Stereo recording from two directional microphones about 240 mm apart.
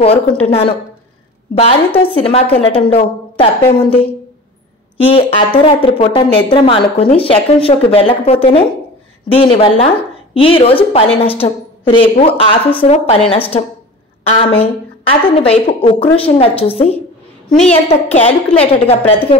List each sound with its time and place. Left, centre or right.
0.0 s a woman's voice: left
2.0 s a woman's voice: left
14.6 s a woman's voice: left